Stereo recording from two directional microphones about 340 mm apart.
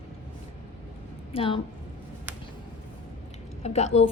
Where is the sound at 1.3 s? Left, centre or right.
Centre.